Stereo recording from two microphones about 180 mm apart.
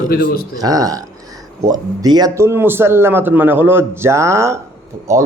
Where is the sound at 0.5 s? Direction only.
20° right (ahead or behind).